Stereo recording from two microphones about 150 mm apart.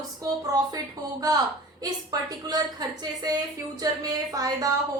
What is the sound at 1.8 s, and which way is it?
A woman's voice, 25° right (ahead or behind).